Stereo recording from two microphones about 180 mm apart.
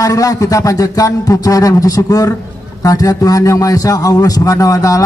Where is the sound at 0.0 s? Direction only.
20° left (ahead or behind).